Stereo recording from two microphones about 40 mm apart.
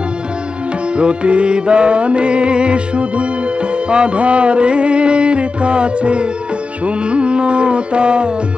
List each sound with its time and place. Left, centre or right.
0.9 s music: right